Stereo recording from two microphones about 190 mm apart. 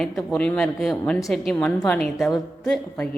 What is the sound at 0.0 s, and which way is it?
Speech, 5° left (ahead or behind).